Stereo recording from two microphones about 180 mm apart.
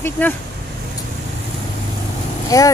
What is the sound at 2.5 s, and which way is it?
Speech, 20° left (ahead or behind).